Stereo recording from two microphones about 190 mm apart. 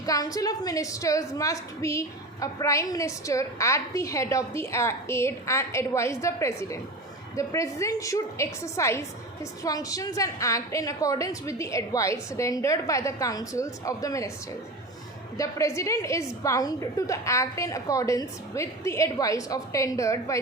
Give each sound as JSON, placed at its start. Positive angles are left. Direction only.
{"t": 0.0, "sound": "a woman's voice", "side_deg": 20}
{"t": 15.4, "sound": "a woman's voice", "side_deg": 15}